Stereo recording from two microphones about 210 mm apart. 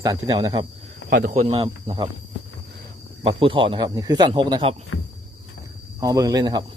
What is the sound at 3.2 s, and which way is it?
A man's voice, 25° right (ahead or behind).